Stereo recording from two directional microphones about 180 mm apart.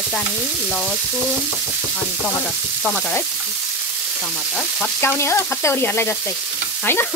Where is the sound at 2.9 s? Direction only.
5° left (ahead or behind).